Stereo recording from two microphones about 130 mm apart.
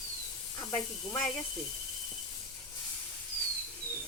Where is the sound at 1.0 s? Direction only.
20° left (ahead or behind).